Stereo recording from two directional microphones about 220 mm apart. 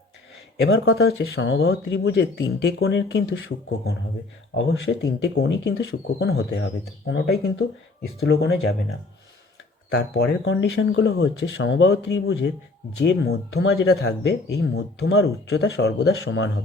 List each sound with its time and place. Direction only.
0.6 s speech: 65° left (ahead or behind)
4.5 s speech: 55° left (ahead or behind)
8.2 s speech: 50° left (ahead or behind)
9.9 s speech: 55° left (ahead or behind)